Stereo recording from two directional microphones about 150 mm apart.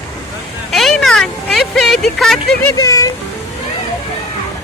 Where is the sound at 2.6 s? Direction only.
20° left (ahead or behind).